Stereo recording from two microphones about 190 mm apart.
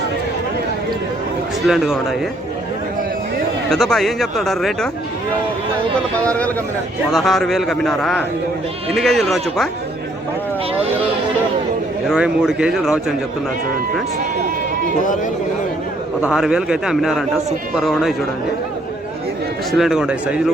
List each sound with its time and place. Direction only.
1.6 s speech: centre (ahead or behind)
3.7 s speech: centre (ahead or behind)
7.1 s speech: centre (ahead or behind)
10.8 s speech: 30° right (ahead or behind)
12.0 s speech: 5° right (ahead or behind)
16.2 s speech: 5° right (ahead or behind)
19.7 s speech: centre (ahead or behind)